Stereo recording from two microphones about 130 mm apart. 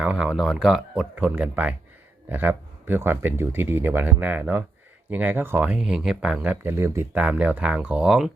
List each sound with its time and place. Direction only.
0.0 s speech: 5° right (ahead or behind)